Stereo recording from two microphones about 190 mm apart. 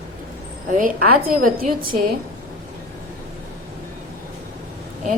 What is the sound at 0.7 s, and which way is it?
A woman's voice, 50° right (ahead or behind).